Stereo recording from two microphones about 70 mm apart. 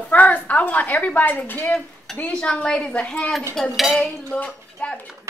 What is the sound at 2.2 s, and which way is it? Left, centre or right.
Speech, centre.